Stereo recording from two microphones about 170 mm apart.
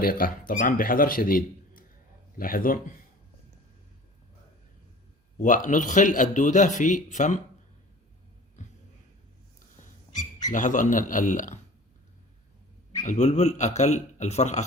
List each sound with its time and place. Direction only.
0.0 s a man's voice: 60° left (ahead or behind)
5.4 s a man's voice: 50° left (ahead or behind)
8.6 s a sound: 45° left (ahead or behind)
10.5 s a man's voice: 50° left (ahead or behind)
13.1 s a man's voice: 40° left (ahead or behind)